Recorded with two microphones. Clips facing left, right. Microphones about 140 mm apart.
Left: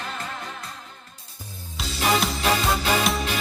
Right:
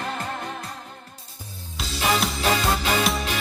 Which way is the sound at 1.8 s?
Centre (ahead or behind).